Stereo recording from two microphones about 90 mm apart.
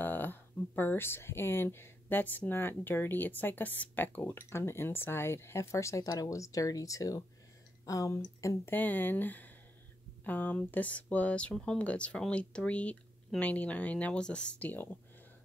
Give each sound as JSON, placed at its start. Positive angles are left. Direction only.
{"t": 0.0, "sound": "speech", "side_deg": 20}
{"t": 8.7, "sound": "speech", "side_deg": 20}